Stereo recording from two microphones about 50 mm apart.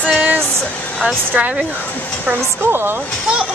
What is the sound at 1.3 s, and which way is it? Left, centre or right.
Speech, right.